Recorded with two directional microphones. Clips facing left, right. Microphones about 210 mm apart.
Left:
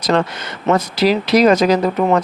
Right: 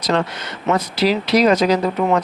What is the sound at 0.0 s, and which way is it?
Speech, 50° left (ahead or behind).